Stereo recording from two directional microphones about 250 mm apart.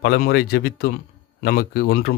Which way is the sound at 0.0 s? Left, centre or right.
Left.